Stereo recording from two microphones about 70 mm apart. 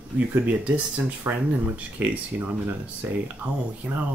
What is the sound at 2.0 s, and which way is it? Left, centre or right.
Speech, right.